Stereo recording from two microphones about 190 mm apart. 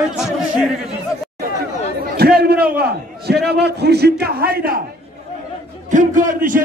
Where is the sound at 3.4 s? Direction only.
60° right (ahead or behind).